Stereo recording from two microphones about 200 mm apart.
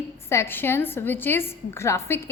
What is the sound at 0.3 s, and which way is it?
A woman's voice, 10° left (ahead or behind).